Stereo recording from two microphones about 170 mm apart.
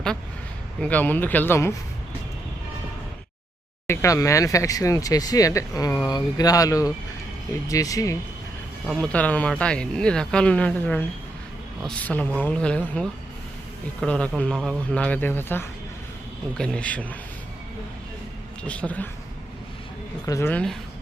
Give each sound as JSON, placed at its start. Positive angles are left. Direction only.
{"t": 0.8, "sound": "speech", "side_deg": 10}
{"t": 3.8, "sound": "speech", "side_deg": 20}
{"t": 8.9, "sound": "speech", "side_deg": 5}
{"t": 18.7, "sound": "speech", "side_deg": 10}
{"t": 20.2, "sound": "speech", "side_deg": 20}
{"t": 20.5, "sound": "speech", "side_deg": 5}